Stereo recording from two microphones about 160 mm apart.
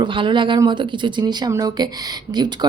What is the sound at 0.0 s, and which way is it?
Speech, 30° right (ahead or behind).